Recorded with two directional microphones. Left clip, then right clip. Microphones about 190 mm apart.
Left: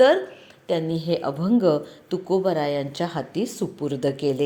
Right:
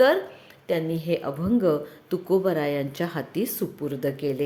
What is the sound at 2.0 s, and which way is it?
Speech, 10° right (ahead or behind).